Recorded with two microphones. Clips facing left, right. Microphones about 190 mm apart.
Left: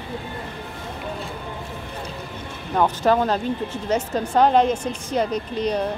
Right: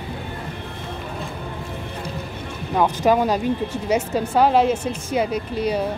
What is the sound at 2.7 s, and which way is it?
Speech, 10° right (ahead or behind).